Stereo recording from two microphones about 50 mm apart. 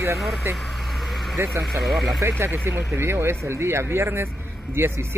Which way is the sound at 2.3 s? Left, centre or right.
Right.